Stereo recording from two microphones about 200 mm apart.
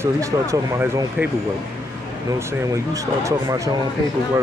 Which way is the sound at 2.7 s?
15° right (ahead or behind).